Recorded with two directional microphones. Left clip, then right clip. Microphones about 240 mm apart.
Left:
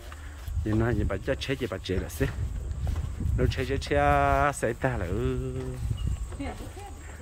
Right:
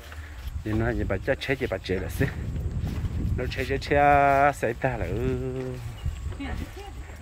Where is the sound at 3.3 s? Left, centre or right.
Centre.